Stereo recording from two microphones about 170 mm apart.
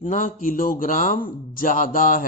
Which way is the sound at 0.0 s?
50° left (ahead or behind).